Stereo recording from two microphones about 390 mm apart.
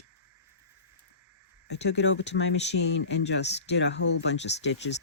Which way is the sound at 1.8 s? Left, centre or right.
Left.